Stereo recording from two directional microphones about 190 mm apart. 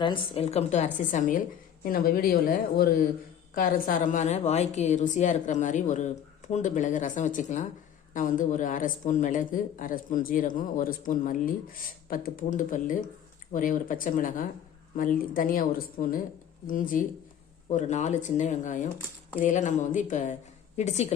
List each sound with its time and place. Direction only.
0.0 s a woman's voice: 30° left (ahead or behind)